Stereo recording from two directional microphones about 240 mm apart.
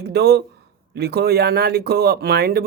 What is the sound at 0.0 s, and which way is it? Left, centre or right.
Speech, right.